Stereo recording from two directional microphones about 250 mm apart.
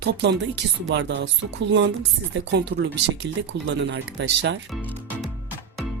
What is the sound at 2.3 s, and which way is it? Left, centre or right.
Speech, right.